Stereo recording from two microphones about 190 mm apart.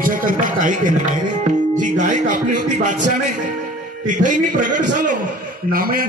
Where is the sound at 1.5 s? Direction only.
40° right (ahead or behind).